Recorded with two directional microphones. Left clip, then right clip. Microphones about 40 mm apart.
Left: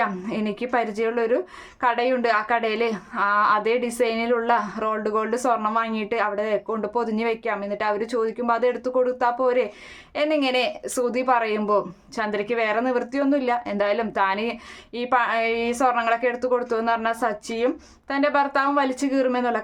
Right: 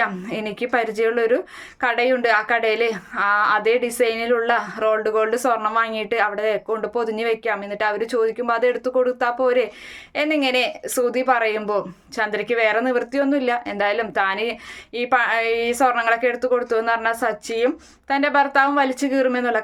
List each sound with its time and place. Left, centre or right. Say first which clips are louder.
0.0 s a woman's voice: right 2 dB; left
1.8 s a woman's voice: right 2 dB; left